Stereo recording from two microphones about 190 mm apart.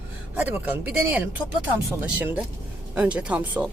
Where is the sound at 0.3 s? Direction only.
10° right (ahead or behind).